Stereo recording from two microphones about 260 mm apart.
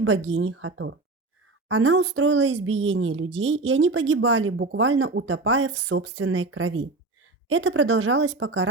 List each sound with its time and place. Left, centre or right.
0.0 s speech: right